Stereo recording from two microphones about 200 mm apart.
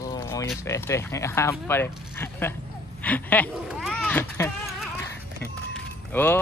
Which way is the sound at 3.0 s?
10° left (ahead or behind).